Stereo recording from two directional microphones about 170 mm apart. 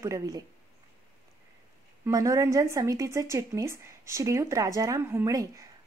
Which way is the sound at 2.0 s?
20° right (ahead or behind).